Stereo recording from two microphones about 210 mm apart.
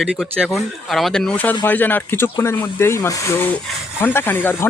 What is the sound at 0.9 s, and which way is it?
A man's voice, 5° left (ahead or behind).